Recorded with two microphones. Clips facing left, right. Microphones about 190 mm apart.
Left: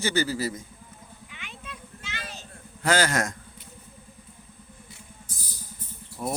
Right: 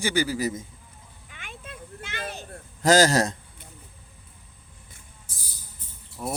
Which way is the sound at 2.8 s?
40° right (ahead or behind).